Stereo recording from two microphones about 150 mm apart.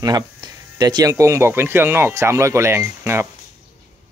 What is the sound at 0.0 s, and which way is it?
Speech, 25° right (ahead or behind).